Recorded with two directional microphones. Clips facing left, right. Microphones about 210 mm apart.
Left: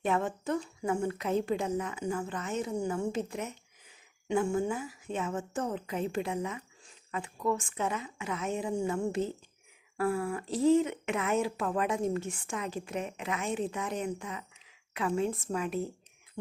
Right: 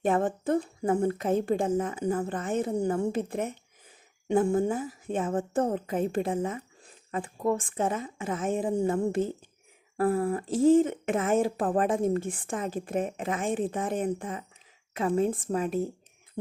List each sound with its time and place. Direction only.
0.0 s speech: 50° right (ahead or behind)
0.8 s a woman's voice: 35° right (ahead or behind)
1.3 s speech: 50° right (ahead or behind)
2.0 s a woman's voice: 35° right (ahead or behind)
2.2 s speech: 50° right (ahead or behind)
4.5 s a woman's voice: 50° right (ahead or behind)
10.0 s a woman's voice: 35° right (ahead or behind)
10.4 s speech: 50° right (ahead or behind)
14.9 s a woman's voice: 35° right (ahead or behind)
15.3 s speech: 45° right (ahead or behind)